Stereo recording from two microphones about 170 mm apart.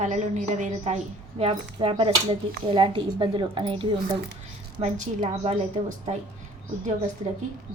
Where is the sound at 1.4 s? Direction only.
30° right (ahead or behind).